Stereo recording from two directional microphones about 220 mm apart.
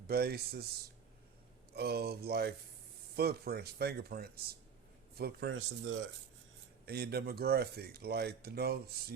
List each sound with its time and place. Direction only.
0.1 s speech: 45° right (ahead or behind)
1.7 s speech: 45° right (ahead or behind)